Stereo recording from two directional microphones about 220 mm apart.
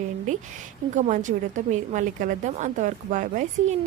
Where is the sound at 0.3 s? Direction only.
35° right (ahead or behind).